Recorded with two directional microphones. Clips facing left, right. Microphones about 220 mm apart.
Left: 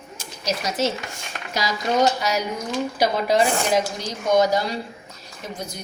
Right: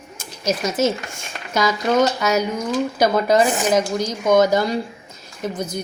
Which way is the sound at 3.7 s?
45° right (ahead or behind).